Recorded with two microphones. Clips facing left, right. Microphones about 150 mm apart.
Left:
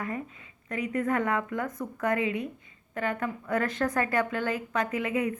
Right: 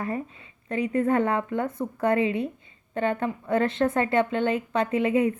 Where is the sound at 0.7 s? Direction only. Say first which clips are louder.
Right 5 dB; 30° right (ahead or behind).